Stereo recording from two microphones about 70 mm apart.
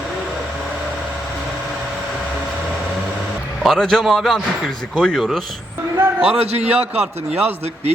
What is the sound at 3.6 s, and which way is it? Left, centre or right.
A man's voice, centre.